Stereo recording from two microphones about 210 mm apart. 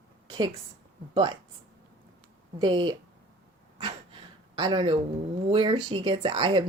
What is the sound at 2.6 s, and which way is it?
Speech, 20° right (ahead or behind).